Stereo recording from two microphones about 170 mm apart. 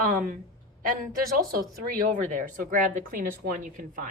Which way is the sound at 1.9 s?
55° right (ahead or behind).